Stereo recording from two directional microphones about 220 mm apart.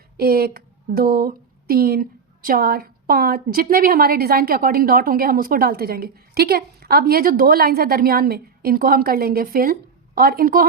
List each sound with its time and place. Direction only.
0.2 s a woman's voice: 45° right (ahead or behind)